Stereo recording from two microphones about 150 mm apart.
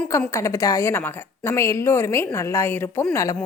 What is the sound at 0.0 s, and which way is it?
A woman's voice, 10° left (ahead or behind).